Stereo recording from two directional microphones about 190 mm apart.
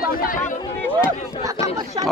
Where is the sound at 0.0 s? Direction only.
50° left (ahead or behind).